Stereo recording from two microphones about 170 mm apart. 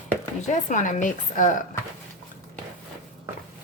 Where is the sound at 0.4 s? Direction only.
50° left (ahead or behind).